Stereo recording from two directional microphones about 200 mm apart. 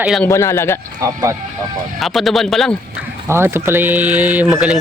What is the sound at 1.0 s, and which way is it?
Speech, 15° right (ahead or behind).